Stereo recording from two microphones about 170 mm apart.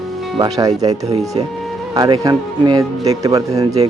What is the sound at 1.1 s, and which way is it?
Speech, 40° right (ahead or behind).